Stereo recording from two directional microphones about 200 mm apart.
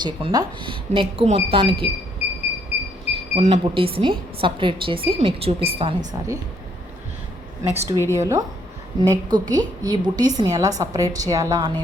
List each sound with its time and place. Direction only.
0.0 s speech: 20° right (ahead or behind)
3.3 s speech: 30° right (ahead or behind)
7.7 s a woman's voice: 15° right (ahead or behind)